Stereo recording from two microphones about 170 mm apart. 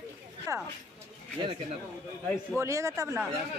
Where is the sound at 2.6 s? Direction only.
20° right (ahead or behind).